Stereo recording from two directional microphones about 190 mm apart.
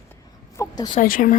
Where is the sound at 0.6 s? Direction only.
20° left (ahead or behind).